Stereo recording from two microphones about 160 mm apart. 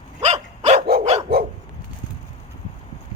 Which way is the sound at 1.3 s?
75° right (ahead or behind).